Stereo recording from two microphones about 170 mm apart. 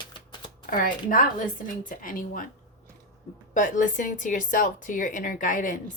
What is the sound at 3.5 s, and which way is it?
Speech, 50° left (ahead or behind).